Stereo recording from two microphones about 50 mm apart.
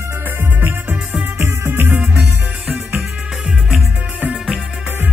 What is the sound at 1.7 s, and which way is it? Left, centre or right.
Music, right.